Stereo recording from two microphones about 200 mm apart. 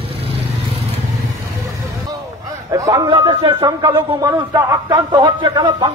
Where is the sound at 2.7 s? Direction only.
20° right (ahead or behind).